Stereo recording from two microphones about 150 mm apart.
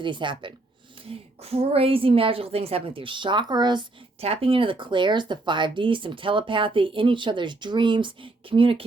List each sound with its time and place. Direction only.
0.0 s speech: 35° right (ahead or behind)
4.2 s speech: 40° right (ahead or behind)